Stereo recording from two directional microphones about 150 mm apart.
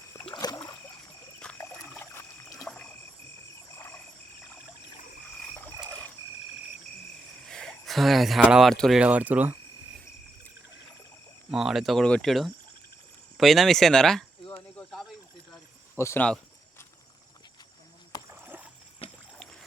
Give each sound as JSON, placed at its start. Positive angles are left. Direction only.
{"t": 0.3, "sound": "rowboat", "side_deg": 25}
{"t": 1.4, "sound": "cricket", "side_deg": 5}
{"t": 2.1, "sound": "a sound", "side_deg": 20}
{"t": 7.4, "sound": "speech", "side_deg": 5}
{"t": 9.0, "sound": "speech", "side_deg": -10}
{"t": 11.5, "sound": "speech", "side_deg": 0}
{"t": 14.5, "sound": "a sound", "side_deg": 5}
{"t": 16.0, "sound": "speech", "side_deg": 20}
{"t": 18.4, "sound": "rowboat", "side_deg": -10}
{"t": 19.0, "sound": "a sound", "side_deg": 40}